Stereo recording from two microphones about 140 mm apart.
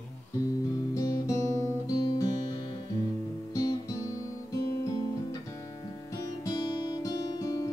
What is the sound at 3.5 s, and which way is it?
Music, 25° left (ahead or behind).